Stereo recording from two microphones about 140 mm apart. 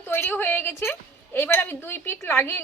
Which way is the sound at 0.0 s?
15° left (ahead or behind).